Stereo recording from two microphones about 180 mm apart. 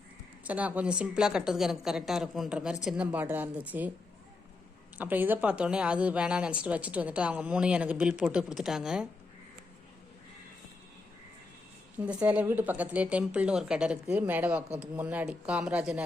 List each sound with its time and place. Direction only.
0.4 s a woman's voice: 10° right (ahead or behind)
4.9 s a woman's voice: 10° right (ahead or behind)
11.9 s a woman's voice: 5° right (ahead or behind)